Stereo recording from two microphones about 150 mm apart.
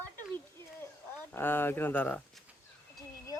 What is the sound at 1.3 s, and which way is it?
Speech, 15° left (ahead or behind).